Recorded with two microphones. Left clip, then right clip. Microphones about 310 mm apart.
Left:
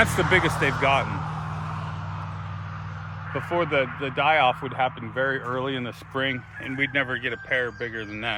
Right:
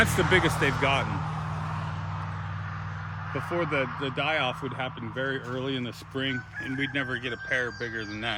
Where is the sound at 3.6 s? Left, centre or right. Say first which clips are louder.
Left 5 dB; centre.